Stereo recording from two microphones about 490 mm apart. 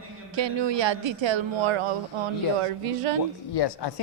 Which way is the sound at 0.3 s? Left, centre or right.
Right.